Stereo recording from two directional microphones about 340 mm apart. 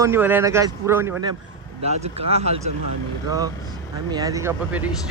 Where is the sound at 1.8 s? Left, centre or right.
Centre.